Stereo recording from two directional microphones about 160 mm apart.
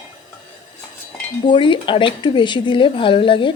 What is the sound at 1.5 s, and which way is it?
Speech, 30° left (ahead or behind).